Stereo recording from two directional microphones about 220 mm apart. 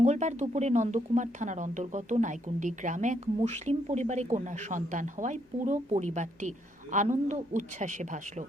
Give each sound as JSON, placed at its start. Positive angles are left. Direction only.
{"t": 0.0, "sound": "speech", "side_deg": -30}